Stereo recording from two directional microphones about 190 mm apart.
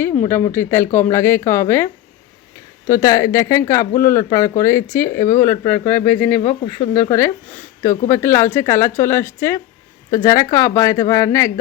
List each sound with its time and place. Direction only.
0.3 s speech: 10° left (ahead or behind)
5.8 s speech: 30° left (ahead or behind)
7.1 s speech: 15° left (ahead or behind)